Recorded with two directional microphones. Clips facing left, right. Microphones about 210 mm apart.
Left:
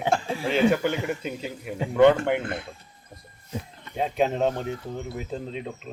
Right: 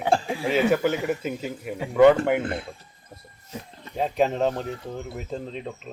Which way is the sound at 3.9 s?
Centre (ahead or behind).